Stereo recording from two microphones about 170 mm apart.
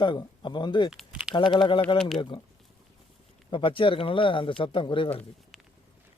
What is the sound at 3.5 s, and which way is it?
A man's voice, 30° left (ahead or behind).